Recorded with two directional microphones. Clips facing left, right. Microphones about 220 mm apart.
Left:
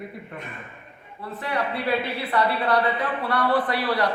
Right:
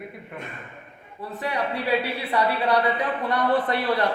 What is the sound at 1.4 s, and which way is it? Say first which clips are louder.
Speech: even; 15° right (ahead or behind).